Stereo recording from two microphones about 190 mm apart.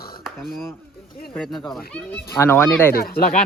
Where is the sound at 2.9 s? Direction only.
50° left (ahead or behind).